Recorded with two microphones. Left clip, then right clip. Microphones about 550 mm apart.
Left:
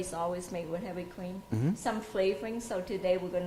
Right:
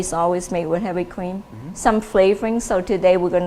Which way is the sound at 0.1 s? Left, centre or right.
Right.